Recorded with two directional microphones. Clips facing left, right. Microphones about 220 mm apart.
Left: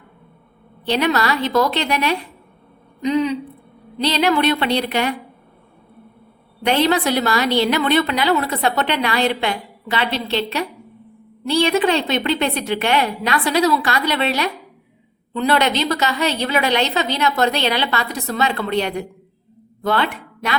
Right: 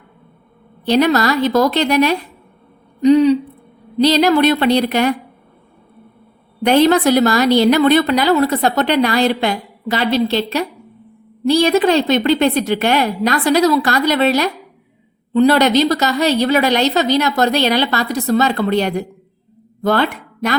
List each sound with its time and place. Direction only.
0.9 s a woman's voice: 40° right (ahead or behind)
6.7 s a woman's voice: 45° right (ahead or behind)